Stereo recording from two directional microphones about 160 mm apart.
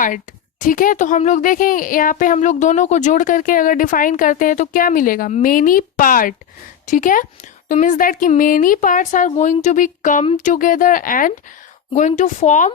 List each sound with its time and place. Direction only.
0.6 s speech: 60° left (ahead or behind)